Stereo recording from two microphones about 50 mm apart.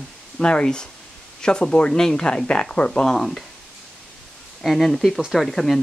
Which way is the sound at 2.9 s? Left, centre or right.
Centre.